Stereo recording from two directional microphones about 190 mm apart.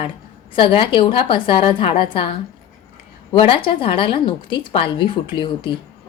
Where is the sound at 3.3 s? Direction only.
30° left (ahead or behind).